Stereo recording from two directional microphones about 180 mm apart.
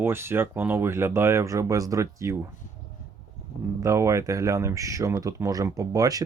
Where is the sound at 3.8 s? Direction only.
15° right (ahead or behind).